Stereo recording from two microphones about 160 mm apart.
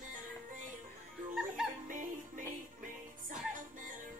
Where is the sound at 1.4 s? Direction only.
5° right (ahead or behind).